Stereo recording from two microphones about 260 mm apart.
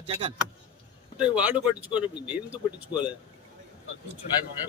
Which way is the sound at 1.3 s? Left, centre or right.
Centre.